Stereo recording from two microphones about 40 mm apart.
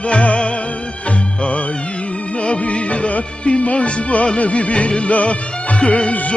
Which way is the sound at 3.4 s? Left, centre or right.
Left.